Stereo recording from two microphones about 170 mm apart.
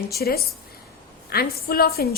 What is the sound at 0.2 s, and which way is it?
A woman's voice, 65° left (ahead or behind).